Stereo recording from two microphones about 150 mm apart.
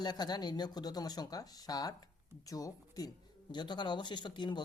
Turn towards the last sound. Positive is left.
turn(degrees=30)  # may be behind; listen again after turning